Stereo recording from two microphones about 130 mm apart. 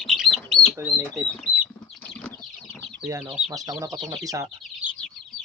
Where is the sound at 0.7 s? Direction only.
20° right (ahead or behind).